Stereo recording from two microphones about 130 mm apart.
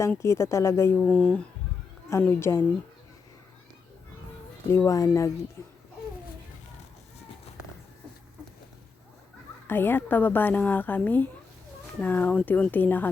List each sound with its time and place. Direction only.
0.1 s speech: 20° left (ahead or behind)
0.9 s a woman's voice: 10° left (ahead or behind)
2.0 s speech: 20° left (ahead or behind)
4.7 s speech: 20° left (ahead or behind)
9.6 s a woman's voice: 15° left (ahead or behind)